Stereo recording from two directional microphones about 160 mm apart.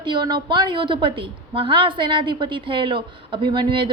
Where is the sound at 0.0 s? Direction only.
30° right (ahead or behind).